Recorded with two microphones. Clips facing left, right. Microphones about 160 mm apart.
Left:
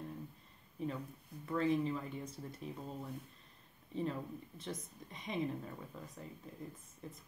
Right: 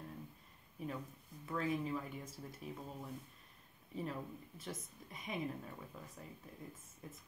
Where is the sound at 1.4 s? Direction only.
5° right (ahead or behind).